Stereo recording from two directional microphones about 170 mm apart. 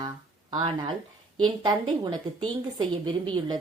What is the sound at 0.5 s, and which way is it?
Speech, 30° right (ahead or behind).